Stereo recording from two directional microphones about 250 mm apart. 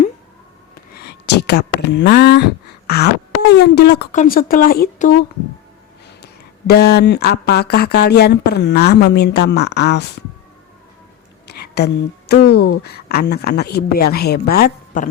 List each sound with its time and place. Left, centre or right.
1.0 s speech: left
6.2 s speech: left
11.4 s speech: left